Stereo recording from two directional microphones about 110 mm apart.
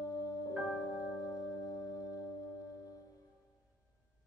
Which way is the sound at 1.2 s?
30° left (ahead or behind).